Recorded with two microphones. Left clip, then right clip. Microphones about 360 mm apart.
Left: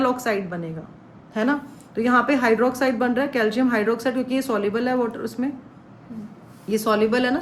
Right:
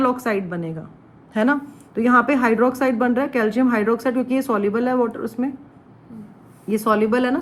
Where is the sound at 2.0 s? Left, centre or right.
Centre.